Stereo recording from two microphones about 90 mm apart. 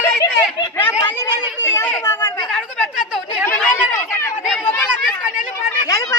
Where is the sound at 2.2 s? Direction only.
50° left (ahead or behind).